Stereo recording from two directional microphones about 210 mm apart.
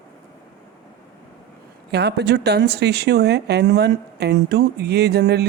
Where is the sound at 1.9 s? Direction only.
50° right (ahead or behind).